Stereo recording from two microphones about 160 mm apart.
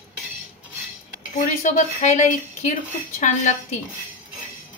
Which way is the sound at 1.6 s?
50° left (ahead or behind).